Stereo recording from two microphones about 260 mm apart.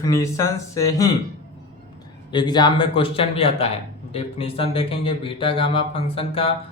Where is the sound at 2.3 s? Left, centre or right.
Centre.